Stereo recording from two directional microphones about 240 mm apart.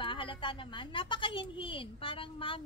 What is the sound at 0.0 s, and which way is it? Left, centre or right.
A woman's voice, left.